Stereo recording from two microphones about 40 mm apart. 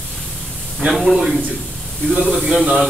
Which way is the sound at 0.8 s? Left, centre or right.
Centre.